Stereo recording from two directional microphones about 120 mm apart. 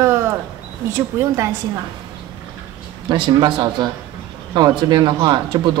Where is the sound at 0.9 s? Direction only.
25° right (ahead or behind).